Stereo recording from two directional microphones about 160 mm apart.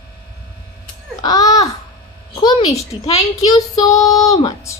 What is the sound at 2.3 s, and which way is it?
A child's voice, 25° left (ahead or behind).